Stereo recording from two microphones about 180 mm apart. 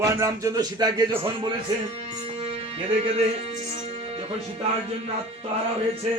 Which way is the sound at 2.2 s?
35° right (ahead or behind).